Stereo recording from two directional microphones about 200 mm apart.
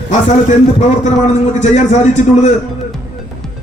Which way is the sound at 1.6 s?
35° left (ahead or behind).